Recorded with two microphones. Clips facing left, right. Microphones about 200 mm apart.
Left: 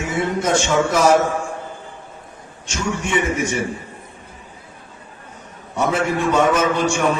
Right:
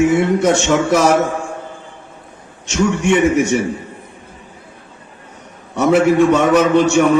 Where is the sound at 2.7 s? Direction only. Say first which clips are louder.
Right 8 dB; 65° right (ahead or behind).